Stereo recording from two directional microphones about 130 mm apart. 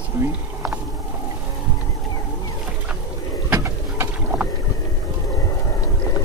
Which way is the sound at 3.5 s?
20° right (ahead or behind).